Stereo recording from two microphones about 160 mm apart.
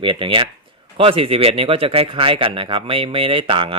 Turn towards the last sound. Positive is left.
turn(degrees=-30)  # may be behind; listen again after turning